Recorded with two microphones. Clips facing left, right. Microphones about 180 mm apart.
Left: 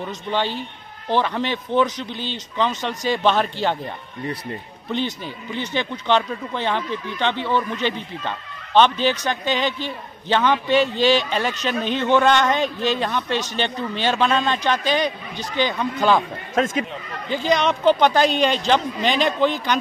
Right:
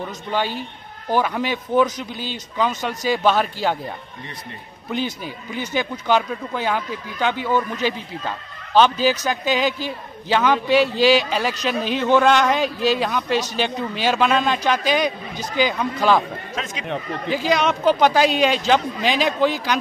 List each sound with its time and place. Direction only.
0.3 s a man's voice: 10° right (ahead or behind)
4.9 s a man's voice: 5° right (ahead or behind)
16.5 s speech: 50° left (ahead or behind)
17.3 s a man's voice: 5° right (ahead or behind)